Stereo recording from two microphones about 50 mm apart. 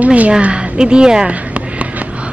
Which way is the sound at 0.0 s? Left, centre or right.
Right.